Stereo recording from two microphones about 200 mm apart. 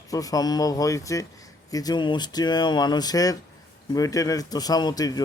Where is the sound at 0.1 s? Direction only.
15° left (ahead or behind).